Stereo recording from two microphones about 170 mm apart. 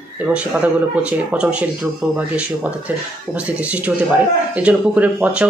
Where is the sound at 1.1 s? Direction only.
5° right (ahead or behind).